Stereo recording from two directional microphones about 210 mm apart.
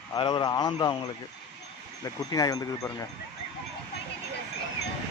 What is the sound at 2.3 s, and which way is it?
Speech, 15° left (ahead or behind).